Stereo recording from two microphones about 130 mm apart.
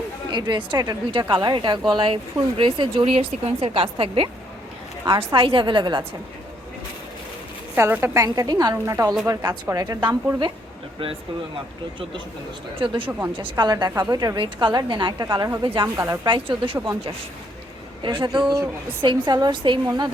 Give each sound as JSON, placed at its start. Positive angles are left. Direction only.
{"t": 0.3, "sound": "a woman's voice", "side_deg": -35}
{"t": 7.8, "sound": "a woman's voice", "side_deg": -20}
{"t": 12.8, "sound": "a woman's voice", "side_deg": -40}
{"t": 13.1, "sound": "a woman's voice", "side_deg": -15}
{"t": 13.3, "sound": "a woman's voice", "side_deg": -40}
{"t": 16.0, "sound": "a woman's voice", "side_deg": -20}
{"t": 16.2, "sound": "a woman's voice", "side_deg": -40}
{"t": 16.7, "sound": "a woman's voice", "side_deg": -15}
{"t": 18.0, "sound": "a woman's voice", "side_deg": -40}
{"t": 18.5, "sound": "a woman's voice", "side_deg": -15}
{"t": 19.0, "sound": "a woman's voice", "side_deg": -35}